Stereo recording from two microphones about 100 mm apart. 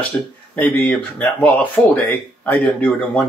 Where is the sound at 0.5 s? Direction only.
15° left (ahead or behind).